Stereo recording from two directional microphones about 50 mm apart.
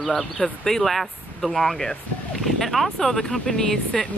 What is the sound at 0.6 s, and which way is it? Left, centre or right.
Speech, centre.